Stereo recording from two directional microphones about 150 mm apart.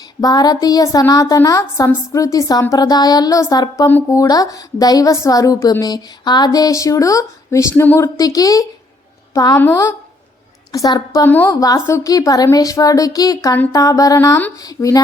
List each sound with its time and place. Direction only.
0.2 s a woman's voice: 25° left (ahead or behind)
10.7 s speech: 25° left (ahead or behind)
11.3 s a woman's voice: 10° left (ahead or behind)